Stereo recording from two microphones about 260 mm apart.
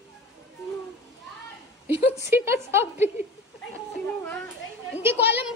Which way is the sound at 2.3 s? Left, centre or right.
Centre.